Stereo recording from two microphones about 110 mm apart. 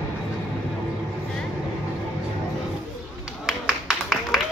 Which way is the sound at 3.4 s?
Centre (ahead or behind).